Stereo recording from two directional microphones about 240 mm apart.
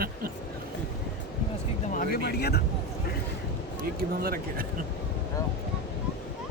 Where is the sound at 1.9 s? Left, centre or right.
Left.